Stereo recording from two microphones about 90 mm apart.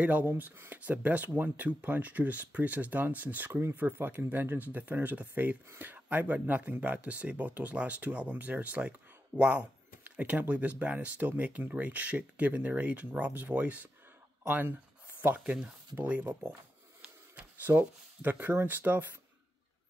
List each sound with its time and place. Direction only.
0.0 s speech: 15° right (ahead or behind)